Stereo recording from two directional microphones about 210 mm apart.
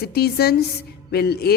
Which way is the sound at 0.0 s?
50° left (ahead or behind).